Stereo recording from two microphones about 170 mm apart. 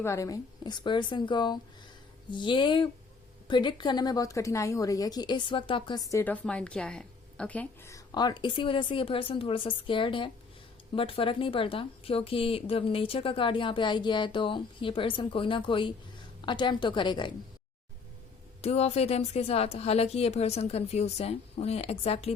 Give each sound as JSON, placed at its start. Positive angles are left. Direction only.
{"t": 0.0, "sound": "a woman's voice", "side_deg": 20}
{"t": 18.6, "sound": "a woman's voice", "side_deg": 40}